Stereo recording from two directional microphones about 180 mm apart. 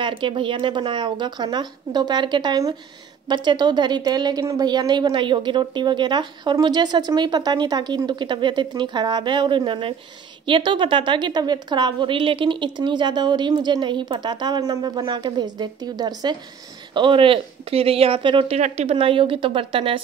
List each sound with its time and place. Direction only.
0.0 s a woman's voice: 30° right (ahead or behind)